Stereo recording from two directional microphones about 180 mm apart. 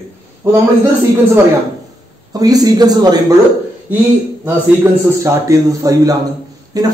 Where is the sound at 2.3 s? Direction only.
20° right (ahead or behind).